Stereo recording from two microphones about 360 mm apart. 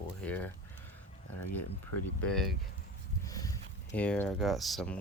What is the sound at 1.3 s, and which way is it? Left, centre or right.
Speech, left.